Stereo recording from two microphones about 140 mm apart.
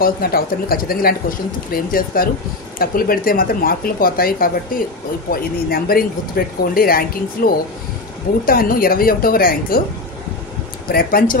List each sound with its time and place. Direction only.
0.0 s speech: 90° left
10.9 s speech: 90° left